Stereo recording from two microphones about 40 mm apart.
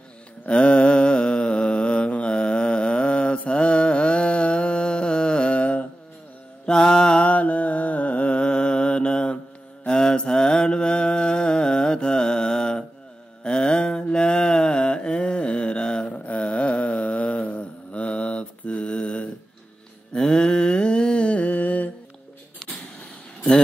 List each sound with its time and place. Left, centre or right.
0.5 s mantra: left
6.6 s mantra: left
16.3 s mantra: left
20.2 s humming: centre; by 21.9 s left